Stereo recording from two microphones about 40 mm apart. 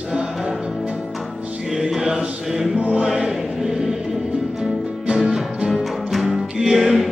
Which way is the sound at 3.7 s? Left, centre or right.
Centre.